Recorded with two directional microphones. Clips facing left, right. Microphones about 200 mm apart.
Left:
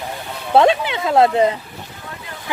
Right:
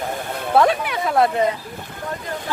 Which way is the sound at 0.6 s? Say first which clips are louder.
Left 3 dB; 25° left (ahead or behind).